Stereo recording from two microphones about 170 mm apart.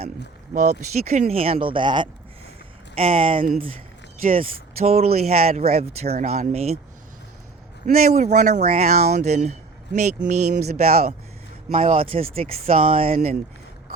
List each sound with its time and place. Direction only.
0.5 s speech: 40° right (ahead or behind)
7.9 s speech: 60° right (ahead or behind)
8.1 s speech: 45° right (ahead or behind)
8.7 s speech: 40° right (ahead or behind)
10.8 s speech: 60° right (ahead or behind)
11.7 s speech: 35° right (ahead or behind)